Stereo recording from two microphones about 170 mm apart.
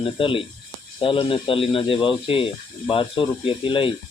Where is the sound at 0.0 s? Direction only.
30° left (ahead or behind).